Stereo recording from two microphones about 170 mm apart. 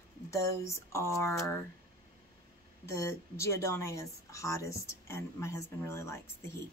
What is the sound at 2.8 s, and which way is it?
A woman's voice, 15° left (ahead or behind).